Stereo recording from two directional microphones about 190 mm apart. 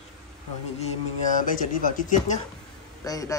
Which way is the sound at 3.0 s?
20° left (ahead or behind).